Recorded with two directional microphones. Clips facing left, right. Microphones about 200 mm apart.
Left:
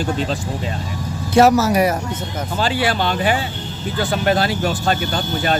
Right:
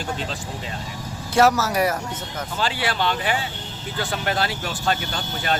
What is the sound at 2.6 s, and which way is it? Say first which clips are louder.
Speech: left 5 dB; 45° left (ahead or behind).